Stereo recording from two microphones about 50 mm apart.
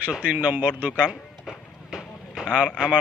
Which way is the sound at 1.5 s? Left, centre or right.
Centre.